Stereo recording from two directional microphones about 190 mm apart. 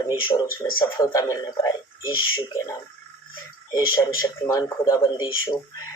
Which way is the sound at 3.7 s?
20° left (ahead or behind).